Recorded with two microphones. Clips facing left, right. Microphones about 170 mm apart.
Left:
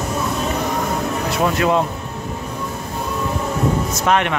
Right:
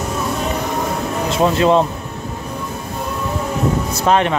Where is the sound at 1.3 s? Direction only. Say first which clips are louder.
Right 4 dB; 25° right (ahead or behind).